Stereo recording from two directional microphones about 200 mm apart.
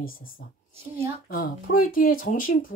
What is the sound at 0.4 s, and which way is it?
Speech, 50° left (ahead or behind).